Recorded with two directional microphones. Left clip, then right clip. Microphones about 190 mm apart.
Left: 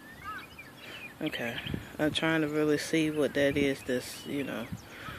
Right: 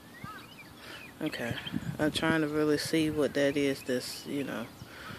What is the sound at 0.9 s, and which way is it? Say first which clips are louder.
Speech: left 1 dB; 5° right (ahead or behind).